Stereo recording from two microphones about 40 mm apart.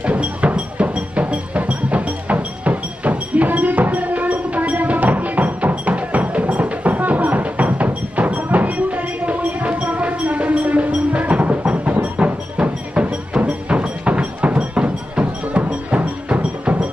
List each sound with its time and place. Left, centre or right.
0.0 s music: right